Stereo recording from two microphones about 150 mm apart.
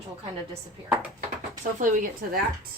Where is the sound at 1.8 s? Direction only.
65° right (ahead or behind).